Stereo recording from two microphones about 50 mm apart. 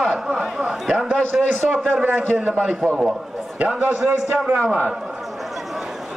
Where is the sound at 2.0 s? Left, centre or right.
Right.